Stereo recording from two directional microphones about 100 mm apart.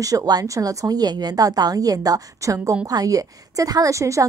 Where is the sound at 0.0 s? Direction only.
35° right (ahead or behind).